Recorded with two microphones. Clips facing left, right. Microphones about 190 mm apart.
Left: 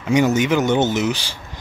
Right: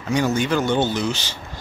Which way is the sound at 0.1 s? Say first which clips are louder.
Left 4 dB; 20° left (ahead or behind).